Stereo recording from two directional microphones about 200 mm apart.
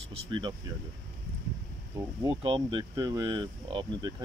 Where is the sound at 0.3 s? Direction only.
25° right (ahead or behind).